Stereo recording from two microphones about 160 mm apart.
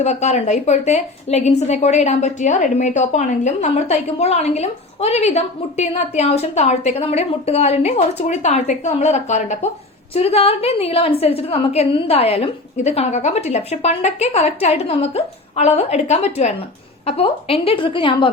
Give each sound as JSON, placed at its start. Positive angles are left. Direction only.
{"t": 0.0, "sound": "a woman's voice", "side_deg": 45}